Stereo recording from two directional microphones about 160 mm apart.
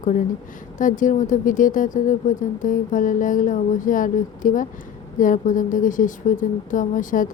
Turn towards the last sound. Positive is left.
turn(degrees=55)  # may be behind; listen again after turning